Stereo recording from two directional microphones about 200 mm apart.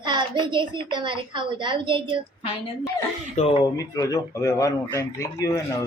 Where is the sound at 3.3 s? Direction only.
30° left (ahead or behind).